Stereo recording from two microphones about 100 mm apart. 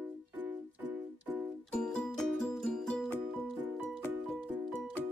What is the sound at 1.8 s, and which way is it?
Music, 10° left (ahead or behind).